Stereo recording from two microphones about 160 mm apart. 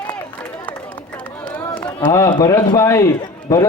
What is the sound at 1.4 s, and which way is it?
Run, 10° left (ahead or behind).